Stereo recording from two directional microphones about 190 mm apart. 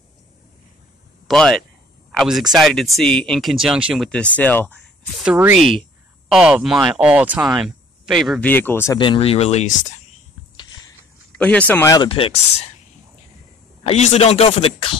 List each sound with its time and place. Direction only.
1.2 s speech: 5° left (ahead or behind)
5.2 s speech: 5° right (ahead or behind); by 8.9 s 10° left (ahead or behind)
8.9 s speech: 25° left (ahead or behind)
11.3 s speech: 5° left (ahead or behind)
11.9 s speech: 25° left (ahead or behind)
13.8 s speech: 35° left (ahead or behind)